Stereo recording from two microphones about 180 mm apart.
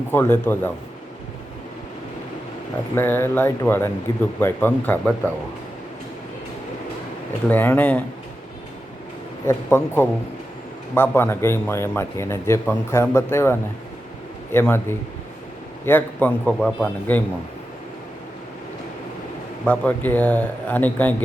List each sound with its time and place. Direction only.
0.1 s speech: 10° left (ahead or behind)
2.9 s speech: 10° left (ahead or behind)
7.4 s speech: 10° left (ahead or behind)
9.5 s speech: 15° left (ahead or behind)
19.6 s speech: 5° left (ahead or behind)